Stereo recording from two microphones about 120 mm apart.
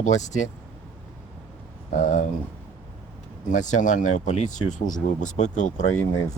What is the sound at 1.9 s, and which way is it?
Speech, 90° left.